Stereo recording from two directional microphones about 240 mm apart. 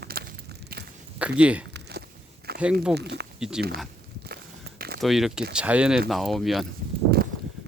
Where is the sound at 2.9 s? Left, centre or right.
Right.